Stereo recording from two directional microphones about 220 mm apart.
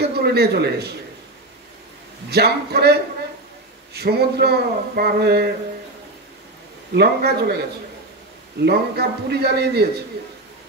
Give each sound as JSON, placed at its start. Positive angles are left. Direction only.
{"t": 0.0, "sound": "a man's voice", "side_deg": -45}
{"t": 2.2, "sound": "speech", "side_deg": -45}
{"t": 6.9, "sound": "speech", "side_deg": -45}